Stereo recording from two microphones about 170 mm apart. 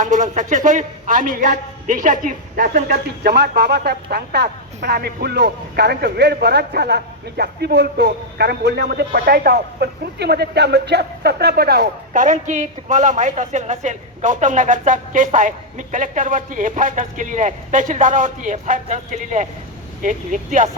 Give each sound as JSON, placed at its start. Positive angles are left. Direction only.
{"t": 0.0, "sound": "a woman's voice", "side_deg": -50}
{"t": 3.2, "sound": "speech", "side_deg": -80}
{"t": 12.1, "sound": "a woman's voice", "side_deg": -50}